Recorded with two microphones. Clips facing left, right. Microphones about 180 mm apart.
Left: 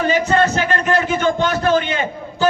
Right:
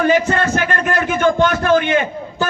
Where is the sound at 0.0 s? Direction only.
50° right (ahead or behind).